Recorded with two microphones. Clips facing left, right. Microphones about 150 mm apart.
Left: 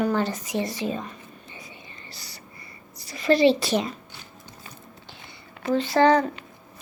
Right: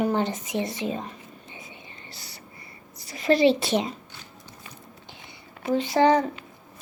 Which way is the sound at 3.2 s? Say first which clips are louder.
Left 1 dB; 20° right (ahead or behind).